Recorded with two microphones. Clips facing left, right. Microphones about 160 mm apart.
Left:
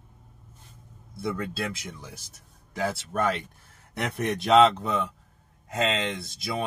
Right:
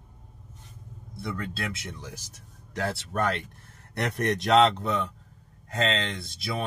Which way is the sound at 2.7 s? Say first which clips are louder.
Left 1 dB; 5° left (ahead or behind).